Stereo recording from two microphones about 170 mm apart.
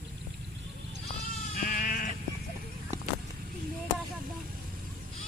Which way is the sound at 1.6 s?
55° left (ahead or behind).